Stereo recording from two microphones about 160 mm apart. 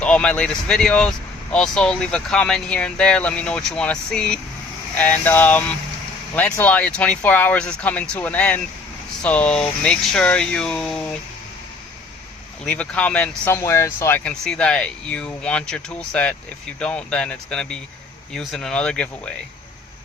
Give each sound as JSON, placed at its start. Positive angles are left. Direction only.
{"t": 0.0, "sound": "speech", "side_deg": 5}
{"t": 12.6, "sound": "speech", "side_deg": 5}